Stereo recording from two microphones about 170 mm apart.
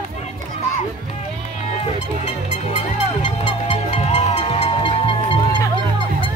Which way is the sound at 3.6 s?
40° left (ahead or behind).